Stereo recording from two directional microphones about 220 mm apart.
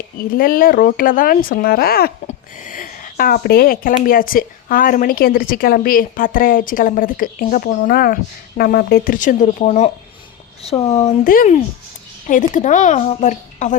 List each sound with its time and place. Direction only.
0.2 s speech: 40° left (ahead or behind)